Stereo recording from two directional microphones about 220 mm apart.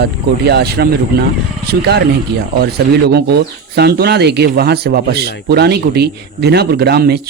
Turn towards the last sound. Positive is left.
turn(degrees=-45)  # may be behind; listen again after turning